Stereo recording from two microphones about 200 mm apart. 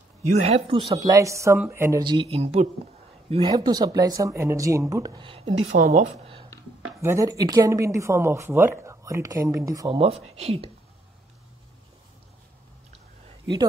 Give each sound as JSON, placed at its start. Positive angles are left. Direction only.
{"t": 0.4, "sound": "speech", "side_deg": -30}
{"t": 0.9, "sound": "speech", "side_deg": -15}
{"t": 7.0, "sound": "speech", "side_deg": -15}
{"t": 9.9, "sound": "speech", "side_deg": -30}